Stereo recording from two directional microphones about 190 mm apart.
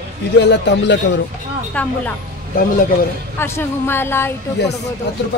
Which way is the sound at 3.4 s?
10° left (ahead or behind).